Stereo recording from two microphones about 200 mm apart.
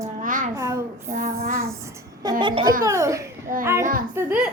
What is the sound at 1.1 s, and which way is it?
Child singing, 45° right (ahead or behind).